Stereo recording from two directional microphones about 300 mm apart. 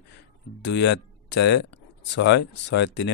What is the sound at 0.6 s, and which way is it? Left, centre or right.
Speech, left.